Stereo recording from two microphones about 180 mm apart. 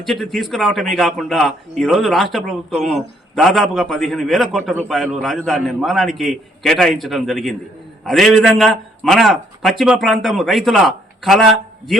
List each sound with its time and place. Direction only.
0.0 s a man's voice: centre (ahead or behind)